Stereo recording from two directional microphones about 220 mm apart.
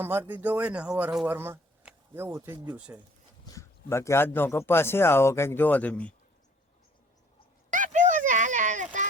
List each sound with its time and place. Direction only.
0.0 s speech: 10° right (ahead or behind)
3.4 s speech: 15° left (ahead or behind)
7.7 s a sound: 35° right (ahead or behind)